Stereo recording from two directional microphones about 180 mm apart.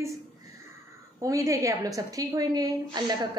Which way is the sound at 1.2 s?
20° right (ahead or behind).